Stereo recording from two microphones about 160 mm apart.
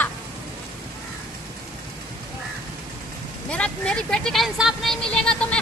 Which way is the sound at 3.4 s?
5° left (ahead or behind).